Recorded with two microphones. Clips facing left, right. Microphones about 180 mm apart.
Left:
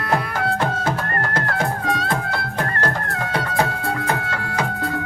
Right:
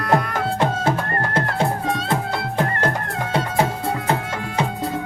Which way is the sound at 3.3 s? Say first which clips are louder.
Right 2 dB; 25° right (ahead or behind).